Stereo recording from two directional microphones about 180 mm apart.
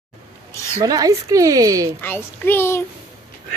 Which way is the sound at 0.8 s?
20° right (ahead or behind).